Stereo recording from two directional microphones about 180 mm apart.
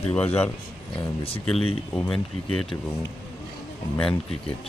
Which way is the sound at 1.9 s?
5° left (ahead or behind).